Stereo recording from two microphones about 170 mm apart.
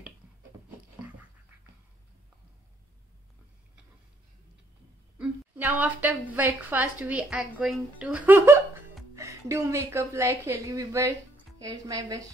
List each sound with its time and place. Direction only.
5.2 s a woman's voice: 10° right (ahead or behind)